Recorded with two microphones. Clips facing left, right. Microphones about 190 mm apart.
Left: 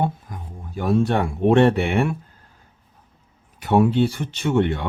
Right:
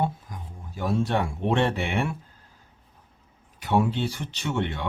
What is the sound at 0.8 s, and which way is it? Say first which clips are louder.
Speech: left 5 dB; 60° left (ahead or behind).